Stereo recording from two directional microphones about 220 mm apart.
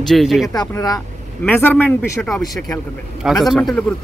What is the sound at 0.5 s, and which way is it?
Speech, 15° left (ahead or behind).